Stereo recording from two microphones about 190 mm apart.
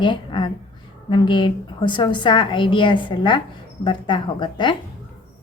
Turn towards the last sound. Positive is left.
turn(degrees=25)  # may be behind; listen again after turning